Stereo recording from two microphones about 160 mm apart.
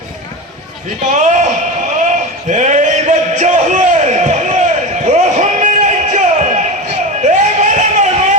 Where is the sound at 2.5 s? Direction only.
50° right (ahead or behind).